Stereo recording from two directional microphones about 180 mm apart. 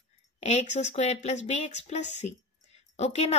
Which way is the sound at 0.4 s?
35° left (ahead or behind).